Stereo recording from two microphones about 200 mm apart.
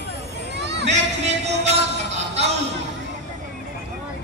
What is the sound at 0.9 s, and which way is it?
Music, 35° right (ahead or behind).